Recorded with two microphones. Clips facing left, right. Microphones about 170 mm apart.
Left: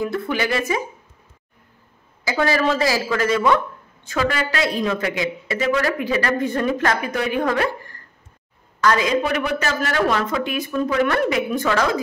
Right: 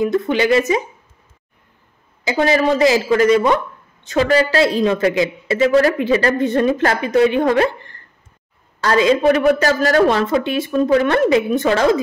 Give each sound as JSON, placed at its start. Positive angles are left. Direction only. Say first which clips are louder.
{"t": 0.0, "sound": "speech", "louder": "right 6 dB", "side_deg": -20}
{"t": 2.2, "sound": "speech", "louder": "right 4 dB", "side_deg": -20}
{"t": 9.4, "sound": "speech", "louder": "right 8 dB", "side_deg": -45}